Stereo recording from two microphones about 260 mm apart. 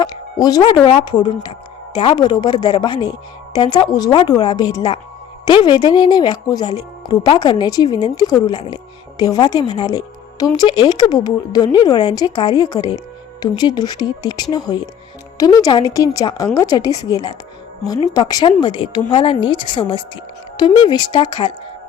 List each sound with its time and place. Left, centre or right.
0.0 s speech: centre